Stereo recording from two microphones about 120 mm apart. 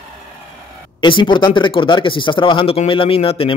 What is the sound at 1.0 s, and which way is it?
Speech, 40° left (ahead or behind).